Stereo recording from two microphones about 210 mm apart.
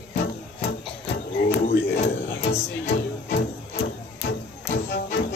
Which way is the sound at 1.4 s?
50° left (ahead or behind).